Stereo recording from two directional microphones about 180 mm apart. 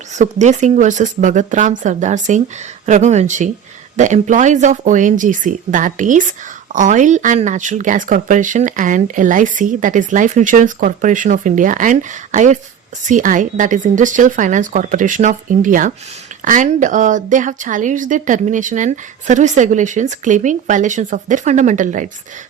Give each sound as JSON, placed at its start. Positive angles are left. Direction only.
{"t": 0.2, "sound": "speech", "side_deg": -40}